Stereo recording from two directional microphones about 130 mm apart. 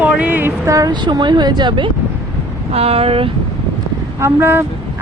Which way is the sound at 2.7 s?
50° right (ahead or behind).